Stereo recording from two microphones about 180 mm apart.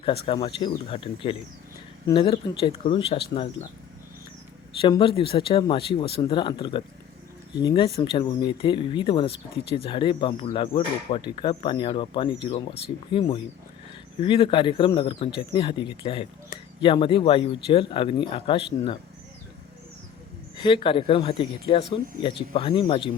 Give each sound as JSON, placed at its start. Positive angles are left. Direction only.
{"t": 0.0, "sound": "speech", "side_deg": 30}
{"t": 4.8, "sound": "speech", "side_deg": 25}
{"t": 20.6, "sound": "speech", "side_deg": 30}